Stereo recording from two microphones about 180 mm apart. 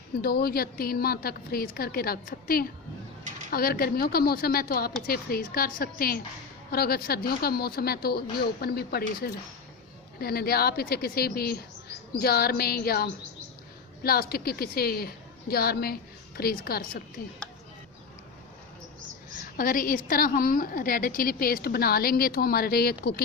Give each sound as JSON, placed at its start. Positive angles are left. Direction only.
{"t": 0.2, "sound": "a woman's voice", "side_deg": 60}
{"t": 19.5, "sound": "a woman's voice", "side_deg": 50}